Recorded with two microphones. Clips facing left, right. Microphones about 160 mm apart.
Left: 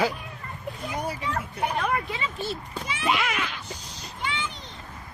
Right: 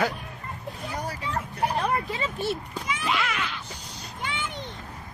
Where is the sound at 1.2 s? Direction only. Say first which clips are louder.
Even; 35° right (ahead or behind).